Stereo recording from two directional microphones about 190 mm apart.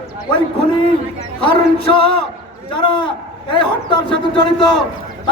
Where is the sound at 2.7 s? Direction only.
25° left (ahead or behind).